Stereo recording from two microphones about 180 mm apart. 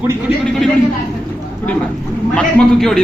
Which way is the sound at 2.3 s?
5° left (ahead or behind).